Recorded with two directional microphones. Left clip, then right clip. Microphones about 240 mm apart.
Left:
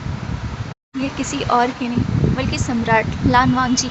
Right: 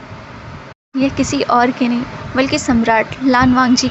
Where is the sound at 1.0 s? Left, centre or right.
Right.